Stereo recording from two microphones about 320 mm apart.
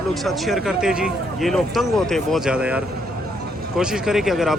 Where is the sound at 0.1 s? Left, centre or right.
Centre.